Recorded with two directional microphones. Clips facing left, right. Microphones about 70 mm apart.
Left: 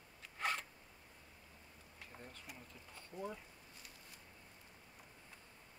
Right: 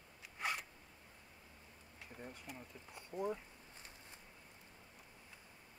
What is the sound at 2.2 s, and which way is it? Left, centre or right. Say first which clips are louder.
Bee: right 6 dB; centre.